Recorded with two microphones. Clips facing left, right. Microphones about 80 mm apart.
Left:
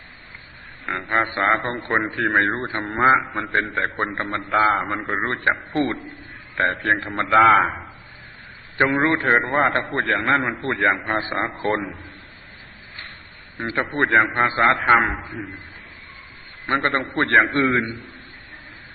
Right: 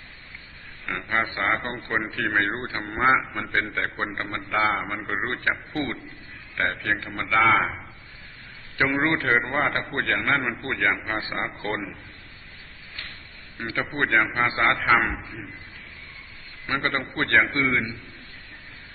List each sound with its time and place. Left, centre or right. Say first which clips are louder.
0.9 s a man's voice: left 4 dB; left
2.5 s a man's voice: left 5 dB; left
4.5 s a man's voice: left 5 dB; left
4.8 s a man's voice: left 5 dB; left
13.7 s a man's voice: left 4 dB; left
16.6 s a man's voice: left 5 dB; left